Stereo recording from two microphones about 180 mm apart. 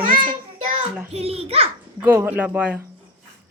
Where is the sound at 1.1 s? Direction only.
35° right (ahead or behind).